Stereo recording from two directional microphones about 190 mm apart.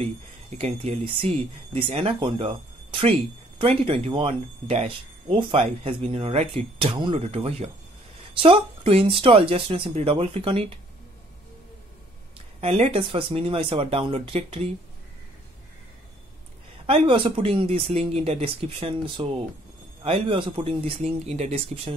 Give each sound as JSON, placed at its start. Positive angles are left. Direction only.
{"t": 0.6, "sound": "speech", "side_deg": -35}
{"t": 12.5, "sound": "speech", "side_deg": -35}
{"t": 16.8, "sound": "speech", "side_deg": -30}